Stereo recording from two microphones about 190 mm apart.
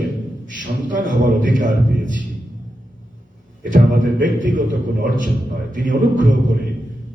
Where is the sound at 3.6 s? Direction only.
45° right (ahead or behind).